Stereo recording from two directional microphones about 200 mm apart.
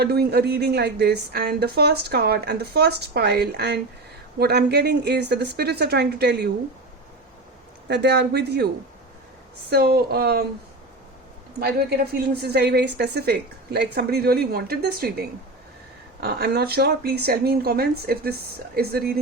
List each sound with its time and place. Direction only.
0.0 s a woman's voice: 55° right (ahead or behind)
7.9 s a woman's voice: 55° right (ahead or behind)
11.6 s speech: 50° right (ahead or behind)